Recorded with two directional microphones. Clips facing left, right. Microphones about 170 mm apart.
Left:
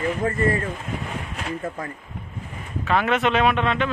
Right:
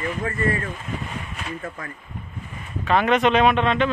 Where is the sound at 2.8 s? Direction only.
5° left (ahead or behind).